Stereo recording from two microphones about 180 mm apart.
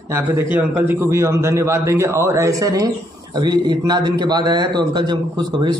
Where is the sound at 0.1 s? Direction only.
10° right (ahead or behind).